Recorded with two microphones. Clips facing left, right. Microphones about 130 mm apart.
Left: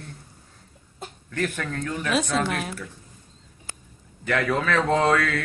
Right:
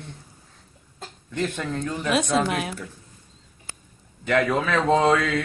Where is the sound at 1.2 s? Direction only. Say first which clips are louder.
Right 1 dB; 20° right (ahead or behind).